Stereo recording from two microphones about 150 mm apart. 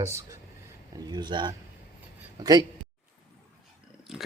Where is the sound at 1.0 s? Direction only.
30° right (ahead or behind).